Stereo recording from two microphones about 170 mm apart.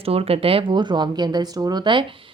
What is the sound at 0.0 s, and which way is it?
Speech, 35° right (ahead or behind).